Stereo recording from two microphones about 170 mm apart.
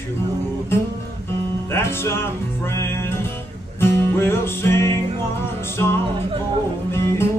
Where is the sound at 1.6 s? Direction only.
15° left (ahead or behind).